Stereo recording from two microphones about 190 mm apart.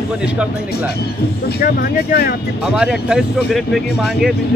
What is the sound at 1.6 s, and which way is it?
Speech, 50° left (ahead or behind).